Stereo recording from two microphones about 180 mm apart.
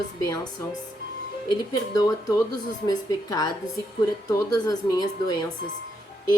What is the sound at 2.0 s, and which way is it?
A woman's voice, 20° left (ahead or behind).